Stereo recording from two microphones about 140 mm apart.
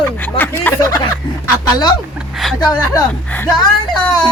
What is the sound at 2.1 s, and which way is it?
Speech, centre (ahead or behind).